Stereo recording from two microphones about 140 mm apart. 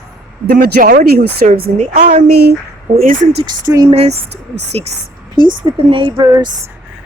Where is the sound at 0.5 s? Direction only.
75° right (ahead or behind).